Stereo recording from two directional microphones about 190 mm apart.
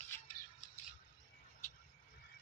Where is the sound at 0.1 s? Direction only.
10° left (ahead or behind).